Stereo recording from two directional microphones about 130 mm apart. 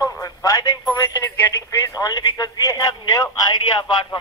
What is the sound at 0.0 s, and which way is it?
Speech, 25° left (ahead or behind).